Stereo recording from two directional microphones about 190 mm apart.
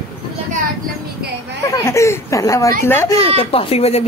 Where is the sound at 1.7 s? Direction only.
15° left (ahead or behind).